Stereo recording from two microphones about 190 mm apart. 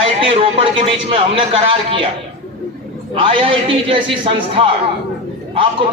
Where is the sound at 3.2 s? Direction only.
25° right (ahead or behind).